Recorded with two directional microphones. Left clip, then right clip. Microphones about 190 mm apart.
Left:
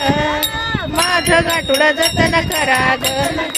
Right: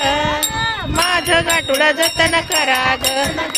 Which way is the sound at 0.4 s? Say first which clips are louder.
Even; 5° right (ahead or behind).